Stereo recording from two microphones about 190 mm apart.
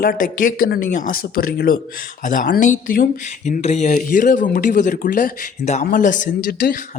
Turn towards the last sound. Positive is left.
turn(degrees=45)  # may be behind; listen again after turning